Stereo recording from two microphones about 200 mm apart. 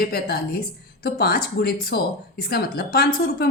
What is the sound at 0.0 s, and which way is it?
A woman's voice, 50° left (ahead or behind).